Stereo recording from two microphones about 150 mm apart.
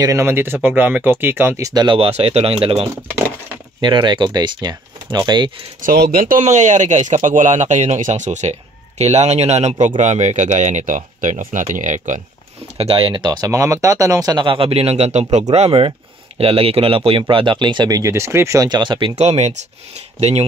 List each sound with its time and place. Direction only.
0.0 s speech: 20° right (ahead or behind)
5.9 s speech: 80° right; by 12.2 s 55° right (ahead or behind)
12.7 s speech: 40° right (ahead or behind)
19.1 s speech: 45° right (ahead or behind)